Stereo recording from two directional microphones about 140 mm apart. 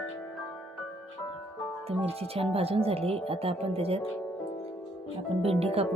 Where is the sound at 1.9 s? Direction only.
45° right (ahead or behind).